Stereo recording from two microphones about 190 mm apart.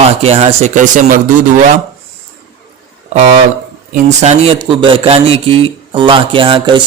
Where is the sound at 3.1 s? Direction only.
35° right (ahead or behind).